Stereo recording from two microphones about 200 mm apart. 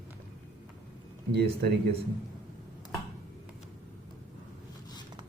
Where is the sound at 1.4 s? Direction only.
55° right (ahead or behind).